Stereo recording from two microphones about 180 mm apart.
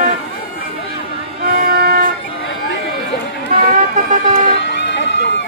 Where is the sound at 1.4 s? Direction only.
60° right (ahead or behind).